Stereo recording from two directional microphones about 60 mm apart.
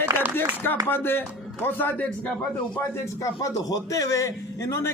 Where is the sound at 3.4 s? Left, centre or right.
Left.